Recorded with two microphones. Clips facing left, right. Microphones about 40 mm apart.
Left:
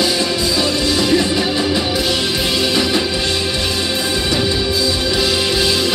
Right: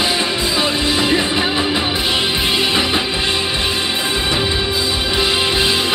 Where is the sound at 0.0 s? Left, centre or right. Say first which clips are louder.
Left 1 dB; right.